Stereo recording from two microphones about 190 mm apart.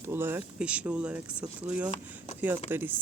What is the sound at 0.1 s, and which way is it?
Speech, 10° right (ahead or behind).